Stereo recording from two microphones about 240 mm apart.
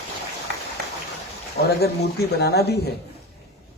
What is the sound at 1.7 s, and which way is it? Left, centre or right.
Speech, left.